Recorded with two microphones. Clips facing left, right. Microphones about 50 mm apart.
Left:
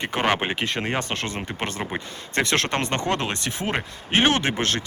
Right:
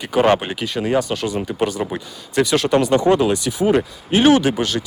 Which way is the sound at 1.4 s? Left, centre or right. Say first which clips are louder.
Right 9 dB; left.